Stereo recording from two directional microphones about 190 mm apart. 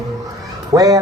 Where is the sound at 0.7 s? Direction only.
20° right (ahead or behind).